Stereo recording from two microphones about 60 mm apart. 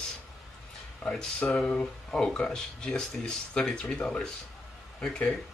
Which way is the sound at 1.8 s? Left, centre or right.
Centre.